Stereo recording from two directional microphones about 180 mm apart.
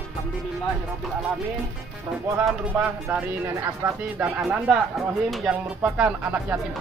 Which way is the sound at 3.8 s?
20° right (ahead or behind).